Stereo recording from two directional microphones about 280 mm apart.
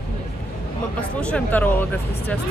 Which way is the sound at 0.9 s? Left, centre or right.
Centre.